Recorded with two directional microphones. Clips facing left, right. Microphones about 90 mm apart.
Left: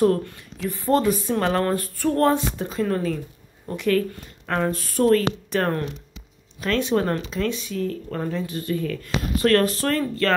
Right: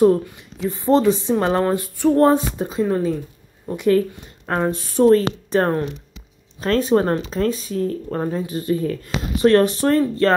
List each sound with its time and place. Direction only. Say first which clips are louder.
0.0 s speech: right 5 dB; 15° right (ahead or behind)
2.2 s speech: right 4 dB; 25° right (ahead or behind)